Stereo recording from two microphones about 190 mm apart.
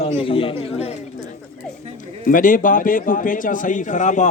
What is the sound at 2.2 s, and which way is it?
A man's voice, 45° left (ahead or behind).